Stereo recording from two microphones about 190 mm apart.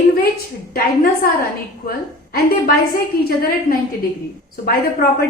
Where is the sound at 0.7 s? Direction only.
50° left (ahead or behind).